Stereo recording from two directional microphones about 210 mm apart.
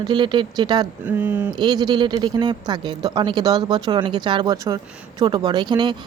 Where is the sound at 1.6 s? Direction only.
20° right (ahead or behind).